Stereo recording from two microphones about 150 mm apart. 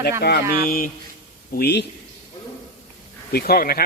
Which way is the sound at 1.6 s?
90° left.